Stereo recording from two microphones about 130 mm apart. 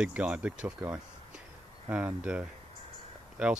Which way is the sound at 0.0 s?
10° right (ahead or behind).